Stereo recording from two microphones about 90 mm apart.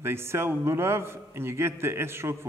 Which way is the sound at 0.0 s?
30° right (ahead or behind).